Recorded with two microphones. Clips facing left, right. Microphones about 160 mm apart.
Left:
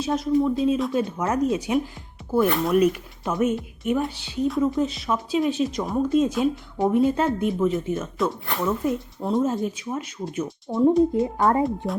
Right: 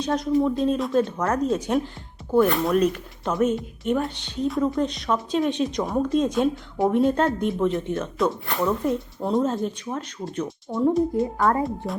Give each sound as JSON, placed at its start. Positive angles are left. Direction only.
{"t": 0.0, "sound": "speech", "side_deg": 0}
{"t": 11.1, "sound": "speech", "side_deg": 20}